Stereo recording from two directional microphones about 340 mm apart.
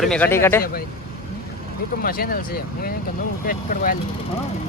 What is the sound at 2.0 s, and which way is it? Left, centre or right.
Speech, left.